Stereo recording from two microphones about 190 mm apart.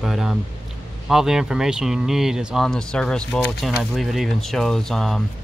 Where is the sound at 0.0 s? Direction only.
Centre (ahead or behind).